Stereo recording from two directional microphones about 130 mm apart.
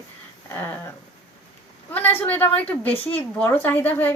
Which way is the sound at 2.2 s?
15° left (ahead or behind).